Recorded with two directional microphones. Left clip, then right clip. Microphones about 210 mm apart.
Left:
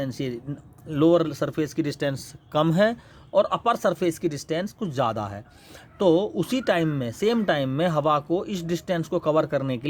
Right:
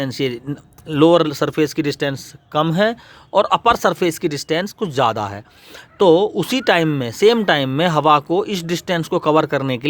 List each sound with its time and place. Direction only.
0.0 s speech: 35° right (ahead or behind)
3.3 s speech: 35° right (ahead or behind)